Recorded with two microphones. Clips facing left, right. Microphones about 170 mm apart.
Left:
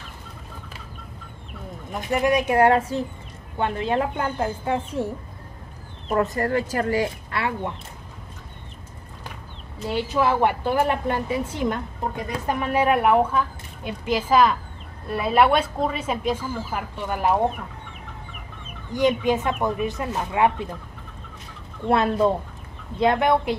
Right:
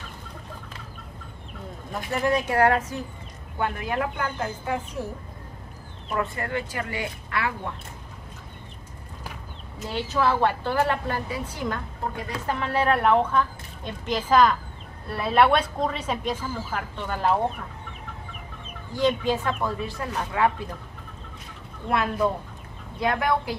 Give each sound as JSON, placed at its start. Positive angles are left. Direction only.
{"t": 1.9, "sound": "speech", "side_deg": 15}
{"t": 6.0, "sound": "speech", "side_deg": 40}
{"t": 7.3, "sound": "speech", "side_deg": 25}
{"t": 10.0, "sound": "a woman's voice", "side_deg": 15}
{"t": 18.9, "sound": "a woman's voice", "side_deg": 20}
{"t": 21.8, "sound": "speech", "side_deg": 30}